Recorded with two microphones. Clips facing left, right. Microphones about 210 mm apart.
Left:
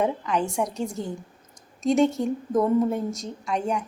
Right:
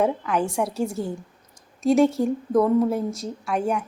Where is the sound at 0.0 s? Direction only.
5° right (ahead or behind).